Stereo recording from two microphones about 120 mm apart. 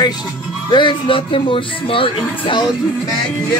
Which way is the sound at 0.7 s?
45° left (ahead or behind).